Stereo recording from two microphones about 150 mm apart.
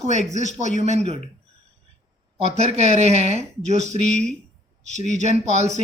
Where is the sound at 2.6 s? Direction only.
50° right (ahead or behind).